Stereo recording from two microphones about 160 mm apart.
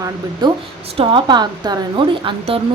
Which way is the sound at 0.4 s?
30° right (ahead or behind).